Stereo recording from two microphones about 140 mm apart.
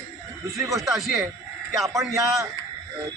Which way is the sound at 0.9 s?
Centre (ahead or behind).